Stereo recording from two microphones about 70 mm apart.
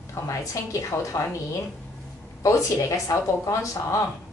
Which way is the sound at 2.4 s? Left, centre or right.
Left.